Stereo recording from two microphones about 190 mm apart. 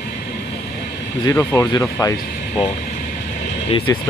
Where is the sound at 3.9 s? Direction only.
20° left (ahead or behind).